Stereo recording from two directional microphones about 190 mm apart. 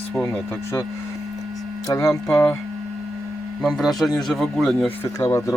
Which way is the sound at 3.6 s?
Centre (ahead or behind).